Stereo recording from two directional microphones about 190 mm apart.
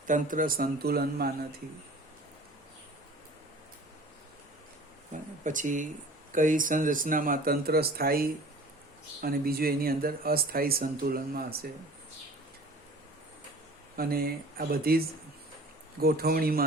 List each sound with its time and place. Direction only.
0.1 s speech: 45° right (ahead or behind)
5.4 s speech: 40° right (ahead or behind)
13.9 s speech: 50° right (ahead or behind)